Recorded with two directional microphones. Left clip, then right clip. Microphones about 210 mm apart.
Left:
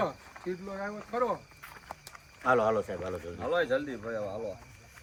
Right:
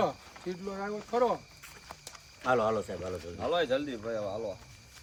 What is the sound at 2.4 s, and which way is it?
A man's voice, centre (ahead or behind).